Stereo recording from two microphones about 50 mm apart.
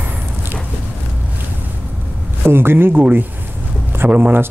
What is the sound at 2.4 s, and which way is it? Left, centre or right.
Speech, right.